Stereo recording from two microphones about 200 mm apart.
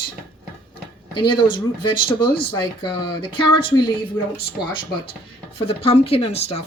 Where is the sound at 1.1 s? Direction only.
25° left (ahead or behind).